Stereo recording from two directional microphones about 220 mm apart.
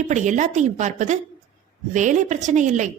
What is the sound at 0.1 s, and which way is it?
A woman's voice, 35° right (ahead or behind).